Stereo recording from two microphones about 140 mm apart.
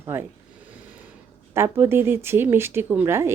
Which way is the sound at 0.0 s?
15° right (ahead or behind).